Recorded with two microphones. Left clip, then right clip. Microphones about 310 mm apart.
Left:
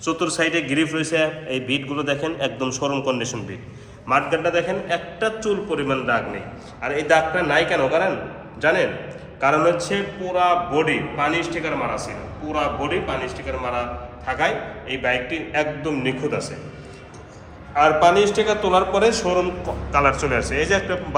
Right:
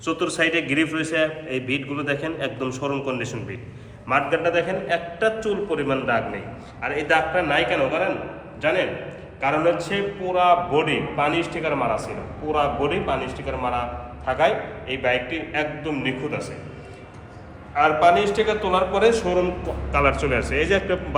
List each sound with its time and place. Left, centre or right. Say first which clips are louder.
0.0 s a man's voice: left 1 dB; centre
17.7 s a man's voice: left 2 dB; centre